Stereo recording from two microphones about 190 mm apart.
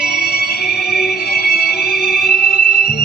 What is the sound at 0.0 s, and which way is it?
Music, 55° left (ahead or behind).